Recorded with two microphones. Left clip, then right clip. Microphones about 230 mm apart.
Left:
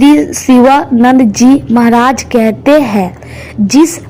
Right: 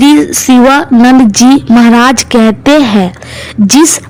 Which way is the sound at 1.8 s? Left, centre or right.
Right.